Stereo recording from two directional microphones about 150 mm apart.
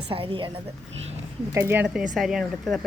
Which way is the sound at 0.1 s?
35° right (ahead or behind).